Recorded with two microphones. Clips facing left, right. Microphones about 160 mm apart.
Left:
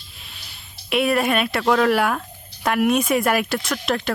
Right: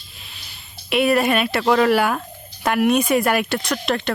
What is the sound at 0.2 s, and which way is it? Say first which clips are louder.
Speech: right 1 dB; centre (ahead or behind).